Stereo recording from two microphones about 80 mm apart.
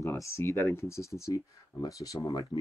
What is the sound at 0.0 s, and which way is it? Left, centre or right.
Speech, left.